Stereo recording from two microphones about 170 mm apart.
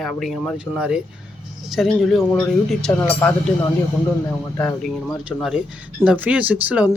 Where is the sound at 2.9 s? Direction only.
15° left (ahead or behind).